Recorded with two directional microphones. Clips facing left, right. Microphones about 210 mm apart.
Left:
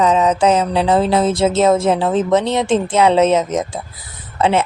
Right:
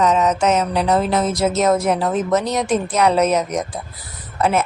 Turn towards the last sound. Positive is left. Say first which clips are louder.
# left 3 dB
turn(degrees=25)  # may be behind; listen again after turning